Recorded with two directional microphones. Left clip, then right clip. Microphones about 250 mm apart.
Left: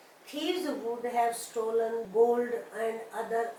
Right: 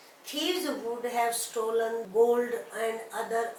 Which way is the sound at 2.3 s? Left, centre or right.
Centre.